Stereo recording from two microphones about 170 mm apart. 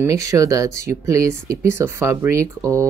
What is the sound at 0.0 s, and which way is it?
Speech, 20° right (ahead or behind).